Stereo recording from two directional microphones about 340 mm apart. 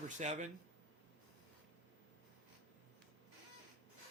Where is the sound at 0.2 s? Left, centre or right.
Centre.